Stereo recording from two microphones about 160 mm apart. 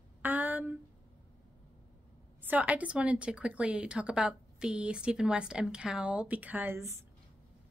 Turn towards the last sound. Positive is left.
turn(degrees=-15)  # may be behind; listen again after turning